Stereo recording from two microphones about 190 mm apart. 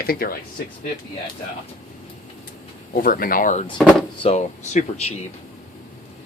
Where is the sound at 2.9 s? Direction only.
50° left (ahead or behind).